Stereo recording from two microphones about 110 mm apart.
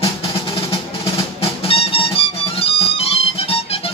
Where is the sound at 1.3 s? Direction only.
60° left (ahead or behind).